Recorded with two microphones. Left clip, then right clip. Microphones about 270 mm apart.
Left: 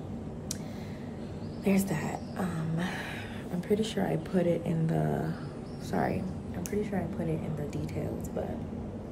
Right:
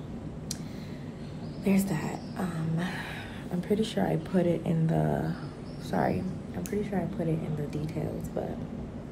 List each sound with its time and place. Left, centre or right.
1.7 s a woman's voice: centre